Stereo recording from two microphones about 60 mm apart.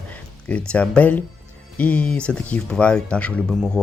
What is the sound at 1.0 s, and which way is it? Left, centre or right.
Speech, left.